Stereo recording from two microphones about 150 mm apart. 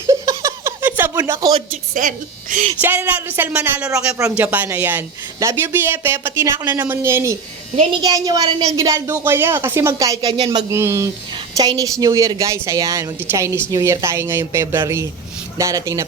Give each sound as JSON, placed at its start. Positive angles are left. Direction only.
{"t": 0.1, "sound": "a sound", "side_deg": -20}
{"t": 1.1, "sound": "speech", "side_deg": -25}
{"t": 2.0, "sound": "a woman's voice", "side_deg": -60}
{"t": 2.8, "sound": "speech", "side_deg": -15}
{"t": 8.0, "sound": "a woman's voice", "side_deg": -30}
{"t": 10.3, "sound": "speech", "side_deg": -40}
{"t": 10.7, "sound": "a woman's voice", "side_deg": -20}